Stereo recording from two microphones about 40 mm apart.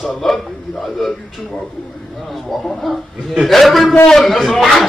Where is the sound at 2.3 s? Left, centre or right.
Centre.